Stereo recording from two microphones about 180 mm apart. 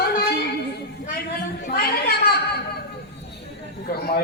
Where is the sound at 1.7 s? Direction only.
60° left (ahead or behind).